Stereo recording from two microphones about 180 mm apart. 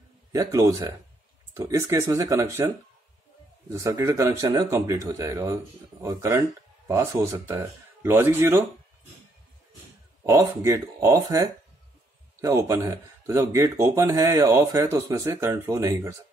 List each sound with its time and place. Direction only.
0.3 s speech: 15° right (ahead or behind)
10.2 s speech: 15° right (ahead or behind)